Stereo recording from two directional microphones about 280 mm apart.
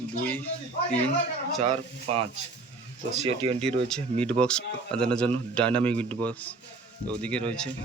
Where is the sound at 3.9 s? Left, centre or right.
Centre.